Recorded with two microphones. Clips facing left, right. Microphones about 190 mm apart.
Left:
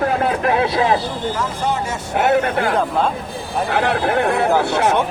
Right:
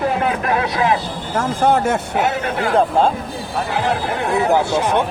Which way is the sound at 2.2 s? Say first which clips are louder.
Left 3 dB; 55° left (ahead or behind).